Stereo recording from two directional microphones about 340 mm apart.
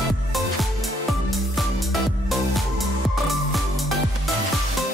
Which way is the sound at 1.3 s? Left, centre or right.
Centre.